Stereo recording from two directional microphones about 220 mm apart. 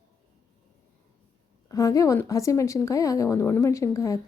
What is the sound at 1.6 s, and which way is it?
A woman's voice, 15° left (ahead or behind).